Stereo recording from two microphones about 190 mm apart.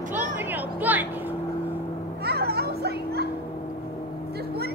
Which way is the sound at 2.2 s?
55° right (ahead or behind).